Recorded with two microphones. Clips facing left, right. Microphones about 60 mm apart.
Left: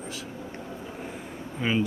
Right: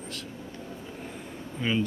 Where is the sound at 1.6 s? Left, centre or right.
Centre.